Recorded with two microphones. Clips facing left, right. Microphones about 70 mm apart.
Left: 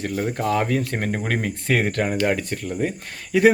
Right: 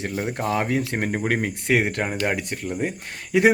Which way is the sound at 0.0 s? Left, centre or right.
Centre.